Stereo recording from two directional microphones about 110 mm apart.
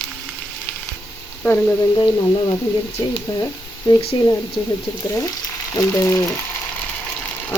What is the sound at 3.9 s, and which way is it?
Speech, 35° left (ahead or behind).